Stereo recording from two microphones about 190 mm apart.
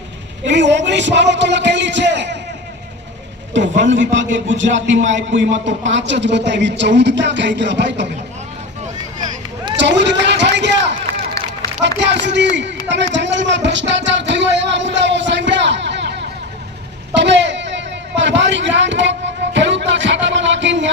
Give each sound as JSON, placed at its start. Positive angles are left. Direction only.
{"t": 0.4, "sound": "a man's voice", "side_deg": -70}
{"t": 3.5, "sound": "a man's voice", "side_deg": -70}
{"t": 9.7, "sound": "run", "side_deg": -70}
{"t": 11.8, "sound": "speech", "side_deg": -70}
{"t": 13.1, "sound": "a sound", "side_deg": -70}